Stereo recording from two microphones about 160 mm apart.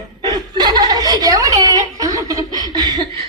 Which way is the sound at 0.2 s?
25° right (ahead or behind).